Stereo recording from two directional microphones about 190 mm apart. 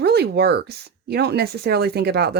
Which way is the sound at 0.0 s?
60° right (ahead or behind).